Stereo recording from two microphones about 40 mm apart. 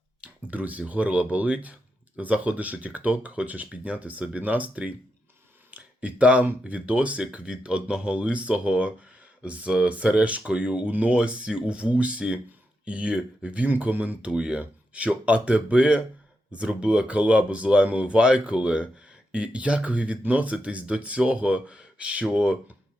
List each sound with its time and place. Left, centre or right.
0.4 s speech: right
5.7 s speech: right
13.7 s speech: right
14.2 s speech: right